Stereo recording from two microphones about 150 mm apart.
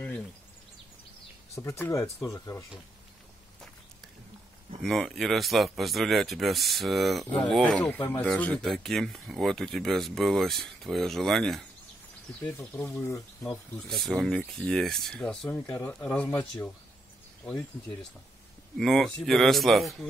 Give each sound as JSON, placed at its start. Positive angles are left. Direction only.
{"t": 1.6, "sound": "speech", "side_deg": 20}
{"t": 4.8, "sound": "speech", "side_deg": 0}
{"t": 7.8, "sound": "speech", "side_deg": 10}
{"t": 12.4, "sound": "speech", "side_deg": 15}
{"t": 13.8, "sound": "speech", "side_deg": 0}
{"t": 15.5, "sound": "speech", "side_deg": 20}
{"t": 15.9, "sound": "speech", "side_deg": 5}
{"t": 18.8, "sound": "speech", "side_deg": 0}